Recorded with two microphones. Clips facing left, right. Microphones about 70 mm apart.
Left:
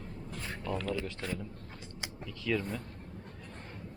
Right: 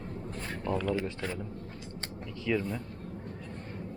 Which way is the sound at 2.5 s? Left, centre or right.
Centre.